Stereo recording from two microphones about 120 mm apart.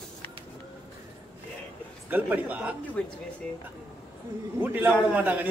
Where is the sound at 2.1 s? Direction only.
15° right (ahead or behind).